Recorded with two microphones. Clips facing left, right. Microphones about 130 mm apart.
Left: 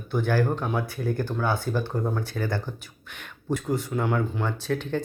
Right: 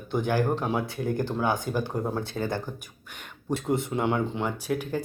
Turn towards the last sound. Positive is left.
turn(degrees=-10)  # may be behind; listen again after turning